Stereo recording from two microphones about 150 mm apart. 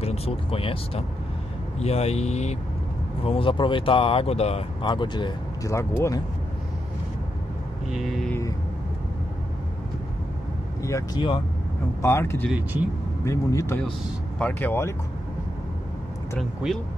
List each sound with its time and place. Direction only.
0.0 s speech: 45° left (ahead or behind)
3.3 s speech: 35° left (ahead or behind)
4.8 s speech: 30° left (ahead or behind)
7.9 s speech: centre (ahead or behind)
10.8 s speech: 20° left (ahead or behind)
12.5 s speech: 10° right (ahead or behind)
13.2 s speech: 20° left (ahead or behind)
16.3 s speech: 5° left (ahead or behind)